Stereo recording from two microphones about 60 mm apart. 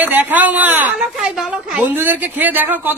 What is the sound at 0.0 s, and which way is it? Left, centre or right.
A man's voice, right.